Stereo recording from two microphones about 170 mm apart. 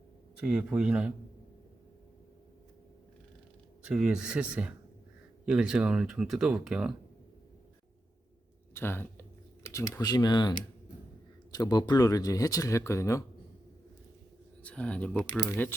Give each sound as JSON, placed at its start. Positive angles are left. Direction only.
{"t": 0.3, "sound": "speech", "side_deg": -5}
{"t": 3.8, "sound": "speech", "side_deg": -5}
{"t": 8.7, "sound": "speech", "side_deg": 15}
{"t": 14.6, "sound": "speech", "side_deg": 5}